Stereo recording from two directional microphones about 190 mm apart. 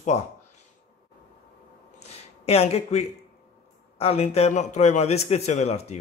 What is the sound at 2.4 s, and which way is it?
A man's voice, 30° left (ahead or behind).